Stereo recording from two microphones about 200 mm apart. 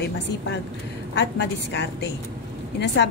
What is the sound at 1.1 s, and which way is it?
A woman's voice, 55° left (ahead or behind).